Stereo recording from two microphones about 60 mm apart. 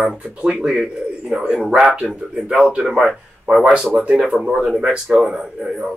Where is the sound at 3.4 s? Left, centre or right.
Centre.